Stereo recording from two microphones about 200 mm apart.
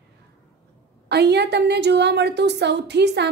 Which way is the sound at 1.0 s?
55° right (ahead or behind).